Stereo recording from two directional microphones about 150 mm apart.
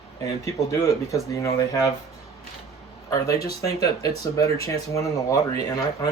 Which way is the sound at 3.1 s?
25° left (ahead or behind).